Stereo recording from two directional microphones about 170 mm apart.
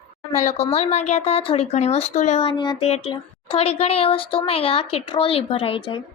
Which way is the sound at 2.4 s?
30° left (ahead or behind).